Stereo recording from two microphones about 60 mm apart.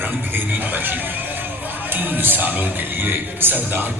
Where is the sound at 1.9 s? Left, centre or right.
Right.